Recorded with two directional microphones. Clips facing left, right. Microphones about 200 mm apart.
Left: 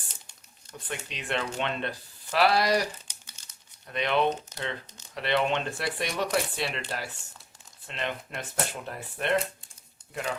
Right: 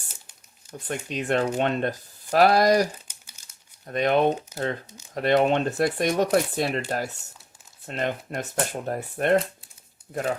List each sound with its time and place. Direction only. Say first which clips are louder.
0.9 s speech: right 8 dB; 45° right (ahead or behind)
3.1 s crumpling: even; 10° right (ahead or behind)
3.8 s speech: right 5 dB; 45° right (ahead or behind)
4.5 s speech: right 8 dB; 10° right (ahead or behind)
5.1 s speech: right 7 dB; 45° right (ahead or behind)